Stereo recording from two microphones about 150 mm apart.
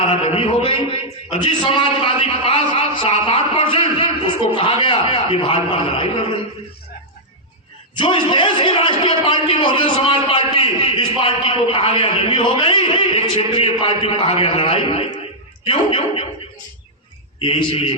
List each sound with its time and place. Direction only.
0.0 s a man's voice: 40° left (ahead or behind)
7.9 s a man's voice: 35° left (ahead or behind)
17.4 s a man's voice: 35° left (ahead or behind)